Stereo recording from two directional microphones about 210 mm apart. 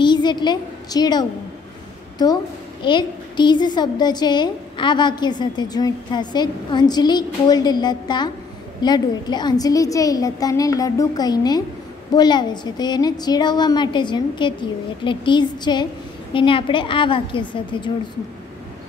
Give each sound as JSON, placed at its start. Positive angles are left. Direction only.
{"t": 0.0, "sound": "a woman's voice", "side_deg": 20}
{"t": 2.8, "sound": "a woman's voice", "side_deg": 20}